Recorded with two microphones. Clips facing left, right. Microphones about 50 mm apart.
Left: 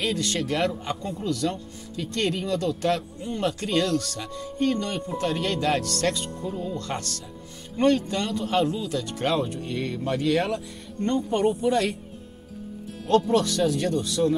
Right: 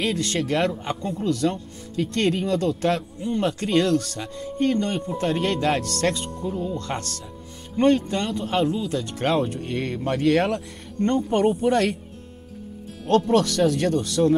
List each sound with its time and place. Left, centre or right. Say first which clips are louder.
0.0 s speech: right 2 dB; right
3.0 s speech: right 4 dB; centre
3.3 s speech: right 3 dB; right
13.0 s speech: right 2 dB; right